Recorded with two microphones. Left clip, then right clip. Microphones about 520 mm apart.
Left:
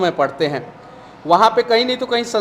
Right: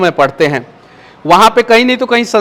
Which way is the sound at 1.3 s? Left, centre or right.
Right.